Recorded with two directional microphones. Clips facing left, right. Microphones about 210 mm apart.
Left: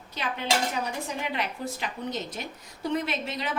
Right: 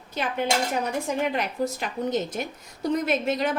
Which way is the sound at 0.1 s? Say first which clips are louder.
Right 6 dB; 50° right (ahead or behind).